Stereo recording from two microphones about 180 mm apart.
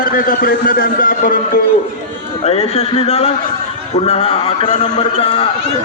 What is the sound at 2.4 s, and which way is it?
A man's voice, 35° left (ahead or behind).